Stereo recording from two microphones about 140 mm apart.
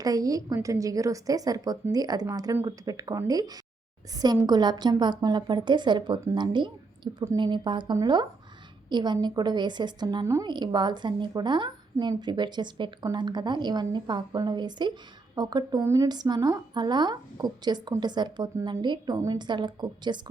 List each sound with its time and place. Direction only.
0.0 s a woman's voice: 25° right (ahead or behind)